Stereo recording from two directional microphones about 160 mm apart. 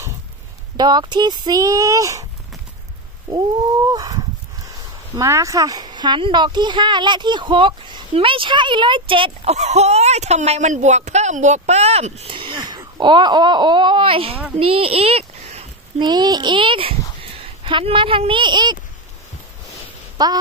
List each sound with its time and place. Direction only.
0.7 s speech: 25° right (ahead or behind)
3.3 s speech: 25° right (ahead or behind)
14.6 s a sound: 35° right (ahead or behind)
16.1 s speech: 25° right (ahead or behind)
20.2 s speech: 25° right (ahead or behind)